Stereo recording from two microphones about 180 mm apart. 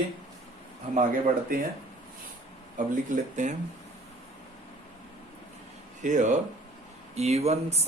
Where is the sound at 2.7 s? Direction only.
45° right (ahead or behind).